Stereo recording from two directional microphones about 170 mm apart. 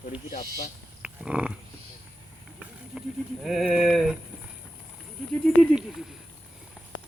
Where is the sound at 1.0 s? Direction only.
5° right (ahead or behind).